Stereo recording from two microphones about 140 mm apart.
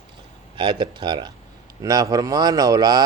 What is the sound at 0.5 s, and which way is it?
Speech, 35° right (ahead or behind).